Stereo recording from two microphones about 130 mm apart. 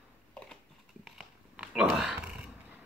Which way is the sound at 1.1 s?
5° right (ahead or behind).